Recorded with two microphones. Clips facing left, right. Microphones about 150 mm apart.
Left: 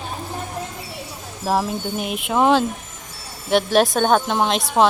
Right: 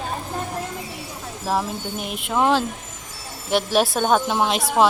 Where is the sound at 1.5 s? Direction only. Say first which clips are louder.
Left 3 dB; 5° left (ahead or behind).